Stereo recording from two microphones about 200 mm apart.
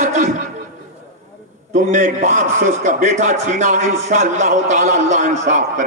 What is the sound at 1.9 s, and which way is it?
Speech, 35° right (ahead or behind).